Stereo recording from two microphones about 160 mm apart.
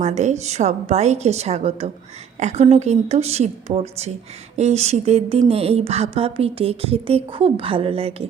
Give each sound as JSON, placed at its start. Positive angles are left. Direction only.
{"t": 0.0, "sound": "a woman's voice", "side_deg": -45}